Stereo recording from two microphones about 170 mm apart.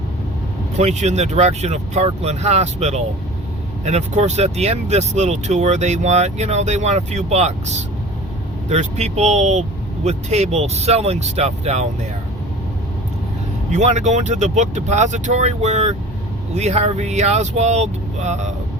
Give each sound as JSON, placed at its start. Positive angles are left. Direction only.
{"t": 0.8, "sound": "speech", "side_deg": -40}
{"t": 13.7, "sound": "speech", "side_deg": -45}